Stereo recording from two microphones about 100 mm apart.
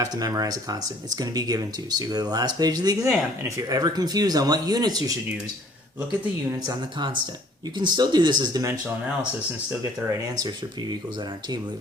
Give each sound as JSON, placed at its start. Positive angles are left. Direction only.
{"t": 0.0, "sound": "speech", "side_deg": -40}
{"t": 6.7, "sound": "speech", "side_deg": -50}